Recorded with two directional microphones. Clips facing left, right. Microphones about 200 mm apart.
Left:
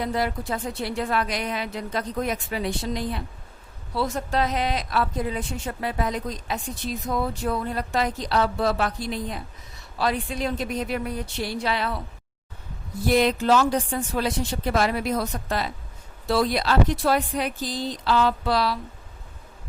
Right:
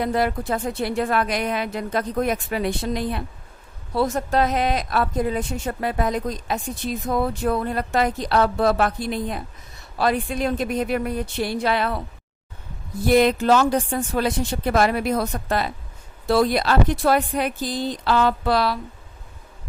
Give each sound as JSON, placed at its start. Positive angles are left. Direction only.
{"t": 0.0, "sound": "speech", "side_deg": -55}
{"t": 13.1, "sound": "speech", "side_deg": -55}